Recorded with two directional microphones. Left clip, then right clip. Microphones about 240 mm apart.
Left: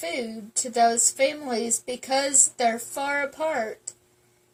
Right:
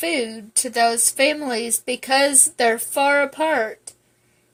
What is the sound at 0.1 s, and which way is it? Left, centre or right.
A woman's voice, right.